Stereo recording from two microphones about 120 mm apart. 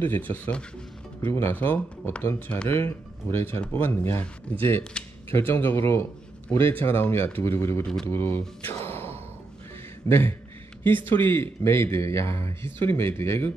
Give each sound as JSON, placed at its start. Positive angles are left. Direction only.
{"t": 0.0, "sound": "speech", "side_deg": 15}
{"t": 7.8, "sound": "speech", "side_deg": 5}
{"t": 8.1, "sound": "speech", "side_deg": 20}